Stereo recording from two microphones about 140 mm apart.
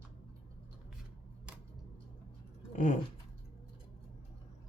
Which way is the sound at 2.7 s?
60° left (ahead or behind).